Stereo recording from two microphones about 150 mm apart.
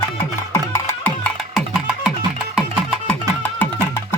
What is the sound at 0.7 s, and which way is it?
Music, 10° left (ahead or behind).